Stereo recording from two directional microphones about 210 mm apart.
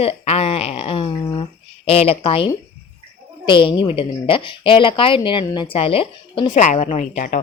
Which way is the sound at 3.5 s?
25° left (ahead or behind).